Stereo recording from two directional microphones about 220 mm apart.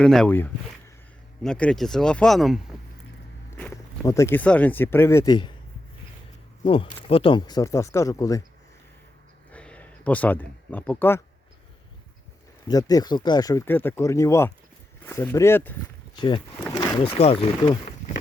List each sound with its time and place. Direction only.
0.0 s speech: 5° left (ahead or behind)
3.5 s speech: 10° left (ahead or behind)
6.7 s speech: 25° left (ahead or behind)
9.5 s a sound: 5° left (ahead or behind)
12.6 s speech: 15° left (ahead or behind)
16.1 s speech: 20° left (ahead or behind)